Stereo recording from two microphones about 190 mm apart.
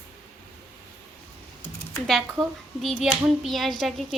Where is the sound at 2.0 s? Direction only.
Centre (ahead or behind).